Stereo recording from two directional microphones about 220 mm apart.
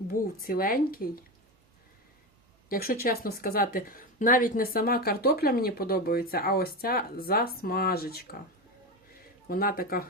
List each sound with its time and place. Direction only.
0.1 s speech: 40° left (ahead or behind)
2.6 s speech: 40° left (ahead or behind)
9.5 s speech: 40° left (ahead or behind)